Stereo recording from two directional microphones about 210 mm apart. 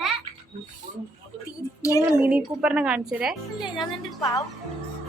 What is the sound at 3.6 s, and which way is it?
Speech, 20° left (ahead or behind).